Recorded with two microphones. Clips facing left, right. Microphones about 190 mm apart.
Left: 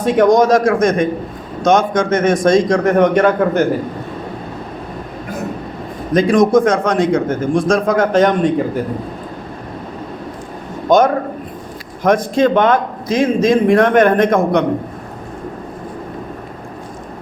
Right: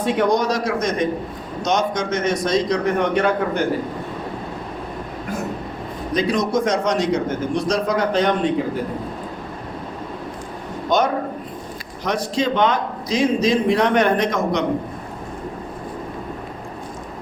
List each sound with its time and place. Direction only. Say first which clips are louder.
0.0 s a man's voice: left 7 dB; 45° left (ahead or behind)
6.1 s a man's voice: left 9 dB; 50° left (ahead or behind)
10.8 s a man's voice: left 7 dB; 50° left (ahead or behind)